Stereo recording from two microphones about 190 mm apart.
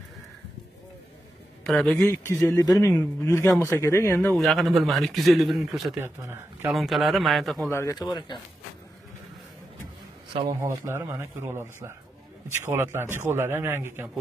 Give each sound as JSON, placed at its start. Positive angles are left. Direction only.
{"t": 1.6, "sound": "a man's voice", "side_deg": 0}
{"t": 2.0, "sound": "speech", "side_deg": 15}
{"t": 4.3, "sound": "a man's voice", "side_deg": 0}
{"t": 6.7, "sound": "a man's voice", "side_deg": 0}
{"t": 7.7, "sound": "speech", "side_deg": 15}
{"t": 10.6, "sound": "a man's voice", "side_deg": -15}